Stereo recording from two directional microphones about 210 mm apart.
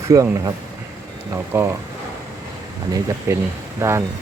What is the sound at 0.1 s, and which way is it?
Speech, 15° right (ahead or behind).